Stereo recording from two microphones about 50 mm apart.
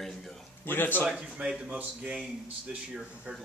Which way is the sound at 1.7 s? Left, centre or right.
Right.